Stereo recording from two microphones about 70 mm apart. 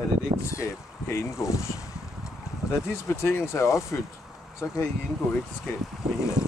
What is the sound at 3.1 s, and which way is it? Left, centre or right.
Speech, left.